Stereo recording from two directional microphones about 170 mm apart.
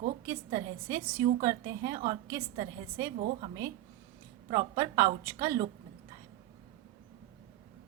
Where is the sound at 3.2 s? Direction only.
45° right (ahead or behind).